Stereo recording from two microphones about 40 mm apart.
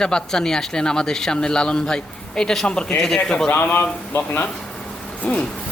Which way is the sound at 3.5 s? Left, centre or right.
Left.